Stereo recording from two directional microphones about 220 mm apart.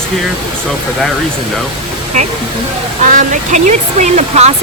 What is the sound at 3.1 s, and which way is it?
Speech, 35° right (ahead or behind).